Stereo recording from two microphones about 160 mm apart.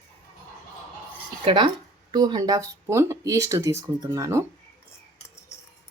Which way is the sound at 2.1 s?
25° right (ahead or behind).